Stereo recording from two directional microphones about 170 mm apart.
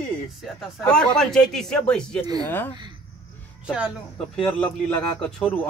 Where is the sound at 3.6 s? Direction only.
5° right (ahead or behind).